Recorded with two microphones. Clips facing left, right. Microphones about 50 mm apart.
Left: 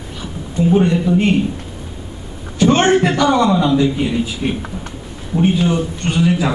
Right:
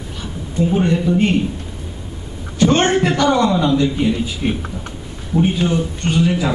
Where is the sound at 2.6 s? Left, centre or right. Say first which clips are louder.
Left 2 dB; centre.